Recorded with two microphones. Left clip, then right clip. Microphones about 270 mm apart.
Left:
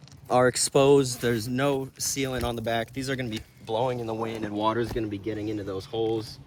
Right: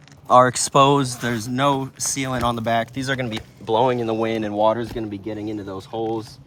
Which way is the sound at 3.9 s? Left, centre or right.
Right.